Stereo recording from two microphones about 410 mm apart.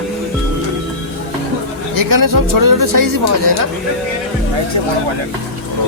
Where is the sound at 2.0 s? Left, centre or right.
Right.